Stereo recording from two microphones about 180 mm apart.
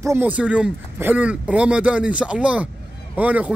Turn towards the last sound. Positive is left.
turn(degrees=-10)  # may be behind; listen again after turning